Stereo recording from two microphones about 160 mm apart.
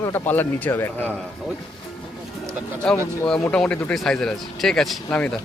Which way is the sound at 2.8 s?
5° left (ahead or behind).